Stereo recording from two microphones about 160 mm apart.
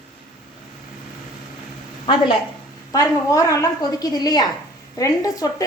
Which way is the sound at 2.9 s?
20° left (ahead or behind).